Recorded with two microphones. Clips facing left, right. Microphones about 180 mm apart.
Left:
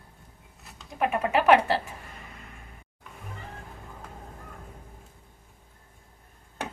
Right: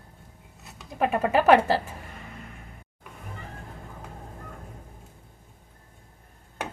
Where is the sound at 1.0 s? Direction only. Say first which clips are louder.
Right 2 dB; 35° right (ahead or behind).